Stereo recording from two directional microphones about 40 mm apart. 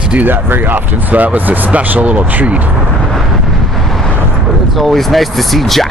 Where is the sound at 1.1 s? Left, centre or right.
Right.